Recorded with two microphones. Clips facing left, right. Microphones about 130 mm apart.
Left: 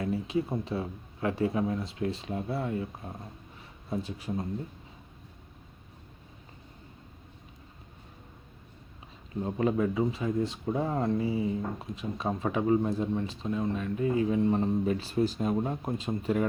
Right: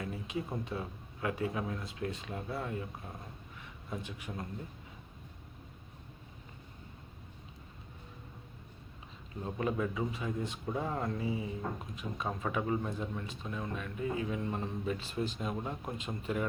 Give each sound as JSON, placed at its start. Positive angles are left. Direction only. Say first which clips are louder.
{"t": 0.0, "sound": "a sound", "louder": "left 9 dB", "side_deg": 30}
{"t": 0.6, "sound": "speech", "louder": "left 6 dB", "side_deg": 30}
{"t": 9.4, "sound": "speech", "louder": "left 6 dB", "side_deg": 30}